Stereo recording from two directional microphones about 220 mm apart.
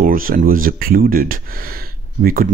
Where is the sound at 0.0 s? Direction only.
40° right (ahead or behind).